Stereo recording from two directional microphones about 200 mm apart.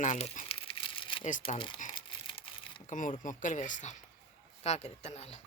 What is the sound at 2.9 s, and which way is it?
Speech, 40° left (ahead or behind).